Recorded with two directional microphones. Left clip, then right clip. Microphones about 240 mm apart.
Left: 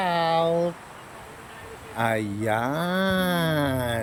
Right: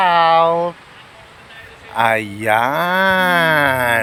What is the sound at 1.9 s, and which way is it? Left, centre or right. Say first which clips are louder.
Speech: right 10 dB; right.